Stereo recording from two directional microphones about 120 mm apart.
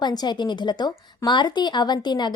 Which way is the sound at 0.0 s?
35° left (ahead or behind).